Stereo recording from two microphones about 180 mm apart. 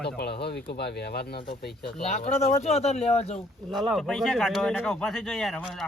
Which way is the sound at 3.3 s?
Centre (ahead or behind).